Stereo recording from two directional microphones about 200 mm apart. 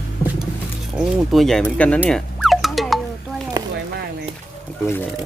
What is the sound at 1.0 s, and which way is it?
Speech, centre (ahead or behind).